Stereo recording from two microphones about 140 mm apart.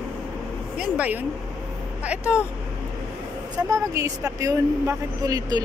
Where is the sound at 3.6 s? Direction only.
25° right (ahead or behind).